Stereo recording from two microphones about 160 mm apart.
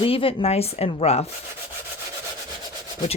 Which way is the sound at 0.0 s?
35° left (ahead or behind).